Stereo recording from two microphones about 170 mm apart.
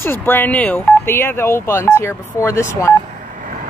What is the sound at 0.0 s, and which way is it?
Speech, 15° left (ahead or behind).